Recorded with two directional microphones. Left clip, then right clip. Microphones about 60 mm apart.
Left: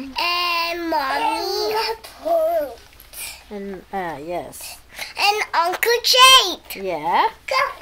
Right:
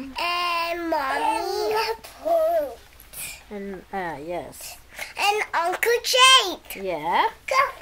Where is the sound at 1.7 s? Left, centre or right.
Right.